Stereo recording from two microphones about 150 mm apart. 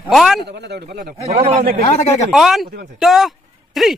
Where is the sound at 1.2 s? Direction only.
40° right (ahead or behind).